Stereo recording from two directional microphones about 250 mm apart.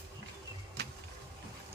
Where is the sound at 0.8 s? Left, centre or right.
Right.